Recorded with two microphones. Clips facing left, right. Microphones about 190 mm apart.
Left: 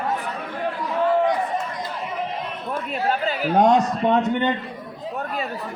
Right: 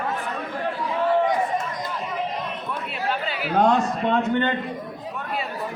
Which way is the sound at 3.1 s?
45° left (ahead or behind).